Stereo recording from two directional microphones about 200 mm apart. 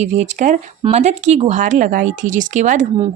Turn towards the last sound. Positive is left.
turn(degrees=-40)  # may be behind; listen again after turning